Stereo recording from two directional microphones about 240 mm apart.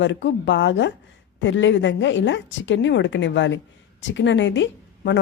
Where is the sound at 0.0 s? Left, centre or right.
Left.